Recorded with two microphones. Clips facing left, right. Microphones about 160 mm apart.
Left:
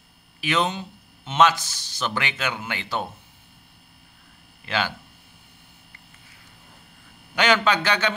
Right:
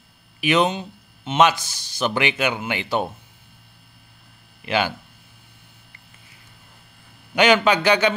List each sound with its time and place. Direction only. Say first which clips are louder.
0.4 s speech: right 5 dB; 15° right (ahead or behind)
4.6 s speech: right 4 dB; 15° right (ahead or behind)
7.3 s speech: right 4 dB; 15° right (ahead or behind)